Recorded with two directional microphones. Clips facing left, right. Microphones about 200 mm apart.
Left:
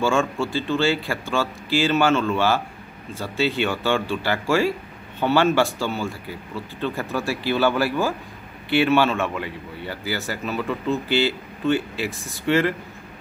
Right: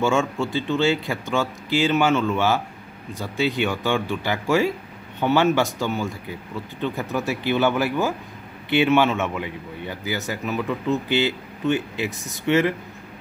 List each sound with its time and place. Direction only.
0.0 s a man's voice: 20° right (ahead or behind)